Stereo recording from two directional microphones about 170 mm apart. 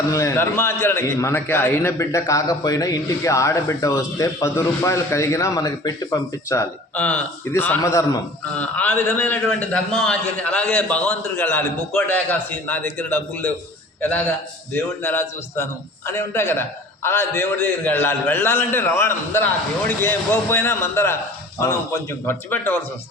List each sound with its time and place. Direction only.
0.1 s a man's voice: 20° left (ahead or behind)
14.7 s a man's voice: 10° left (ahead or behind)